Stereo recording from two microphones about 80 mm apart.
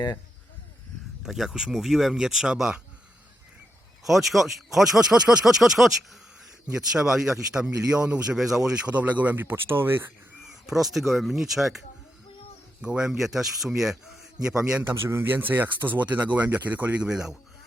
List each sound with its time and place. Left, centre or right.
1.2 s speech: centre
4.0 s speech: centre
8.9 s speech: centre
10.4 s speech: centre
12.8 s speech: centre
14.8 s speech: right; by 17.3 s centre